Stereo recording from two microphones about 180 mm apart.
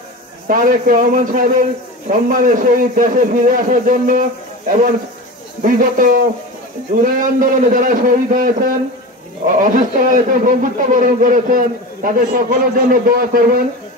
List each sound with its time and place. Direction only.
0.5 s a man's voice: 50° right (ahead or behind)